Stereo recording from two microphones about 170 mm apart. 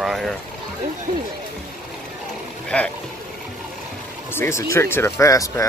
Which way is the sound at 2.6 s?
10° left (ahead or behind).